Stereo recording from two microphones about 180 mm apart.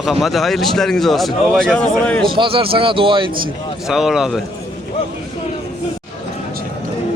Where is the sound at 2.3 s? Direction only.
30° right (ahead or behind).